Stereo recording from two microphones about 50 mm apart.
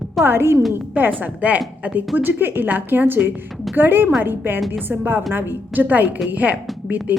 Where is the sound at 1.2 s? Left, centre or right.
Right.